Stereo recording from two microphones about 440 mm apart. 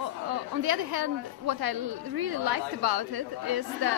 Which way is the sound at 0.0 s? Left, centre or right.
Right.